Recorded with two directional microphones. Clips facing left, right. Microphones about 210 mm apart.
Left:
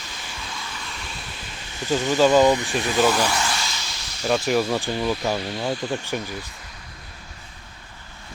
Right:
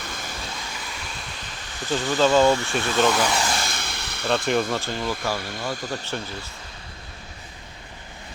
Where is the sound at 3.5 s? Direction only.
55° right (ahead or behind).